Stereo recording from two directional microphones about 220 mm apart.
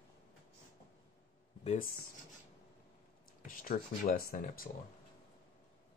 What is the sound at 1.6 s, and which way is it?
Speech, 40° left (ahead or behind).